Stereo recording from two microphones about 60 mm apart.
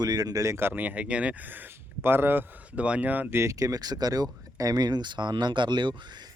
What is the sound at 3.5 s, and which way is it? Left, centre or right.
Speech, right.